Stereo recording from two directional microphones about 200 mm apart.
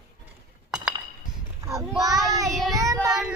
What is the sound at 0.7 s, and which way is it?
Chink, 5° right (ahead or behind).